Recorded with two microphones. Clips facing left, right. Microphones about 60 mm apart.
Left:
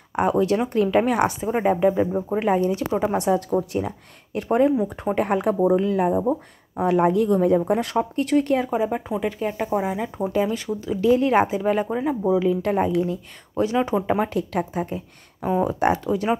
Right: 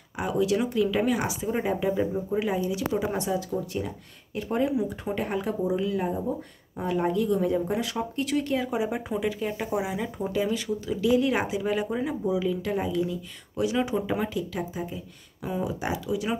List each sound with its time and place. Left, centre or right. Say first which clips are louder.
0.1 s speech: left 6 dB; left
1.4 s speech: left 7 dB; left
2.1 s speech: left 6 dB; left
9.1 s speech: left 3 dB; left
10.3 s speech: left 3 dB; left
12.6 s speech: left 6 dB; left
13.8 s speech: left 6 dB; left
14.3 s speech: left 6 dB; left